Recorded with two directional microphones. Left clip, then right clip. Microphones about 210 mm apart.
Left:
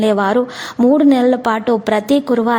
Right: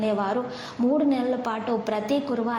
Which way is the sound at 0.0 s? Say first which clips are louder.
Left 11 dB; 45° left (ahead or behind).